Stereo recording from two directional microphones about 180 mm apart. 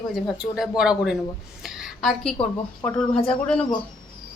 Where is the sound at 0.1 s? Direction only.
5° right (ahead or behind).